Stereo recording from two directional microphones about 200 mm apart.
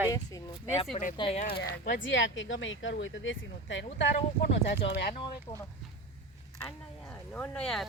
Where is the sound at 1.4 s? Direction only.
50° left (ahead or behind).